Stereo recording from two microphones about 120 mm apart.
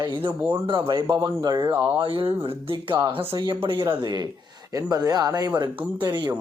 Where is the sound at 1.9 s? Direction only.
45° right (ahead or behind).